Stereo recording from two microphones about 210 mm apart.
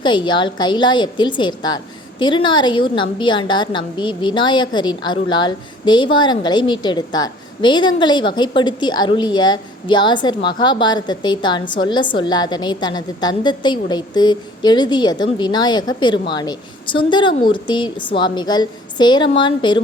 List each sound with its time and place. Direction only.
0.0 s a woman's voice: 20° left (ahead or behind)